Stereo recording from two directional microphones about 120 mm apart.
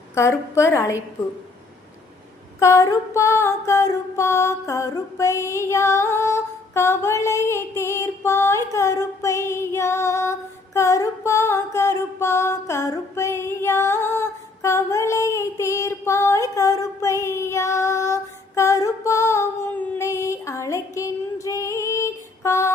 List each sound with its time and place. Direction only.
0.1 s music: 25° left (ahead or behind)
2.6 s music: 25° left (ahead or behind)
20.0 s female singing: 25° left (ahead or behind)